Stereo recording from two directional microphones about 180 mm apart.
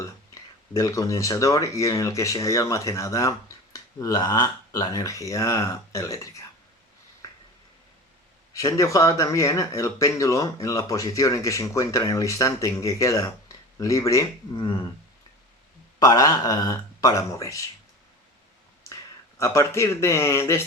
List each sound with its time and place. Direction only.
0.7 s speech: 20° left (ahead or behind)
8.5 s speech: 20° left (ahead or behind)
16.0 s speech: 20° left (ahead or behind)
19.4 s speech: 15° left (ahead or behind)